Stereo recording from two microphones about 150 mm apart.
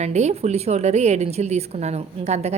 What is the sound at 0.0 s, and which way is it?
A woman's voice, 50° right (ahead or behind).